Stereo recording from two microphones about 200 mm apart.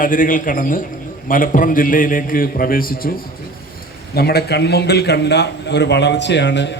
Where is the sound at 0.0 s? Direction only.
45° left (ahead or behind).